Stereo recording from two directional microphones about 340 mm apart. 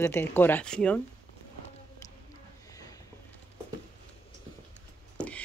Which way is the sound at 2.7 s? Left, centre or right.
Centre.